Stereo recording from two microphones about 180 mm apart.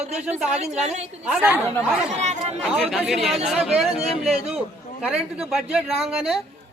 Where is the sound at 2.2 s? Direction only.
40° right (ahead or behind).